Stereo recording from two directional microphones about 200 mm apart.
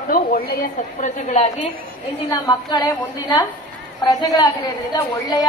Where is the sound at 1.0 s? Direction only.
35° left (ahead or behind).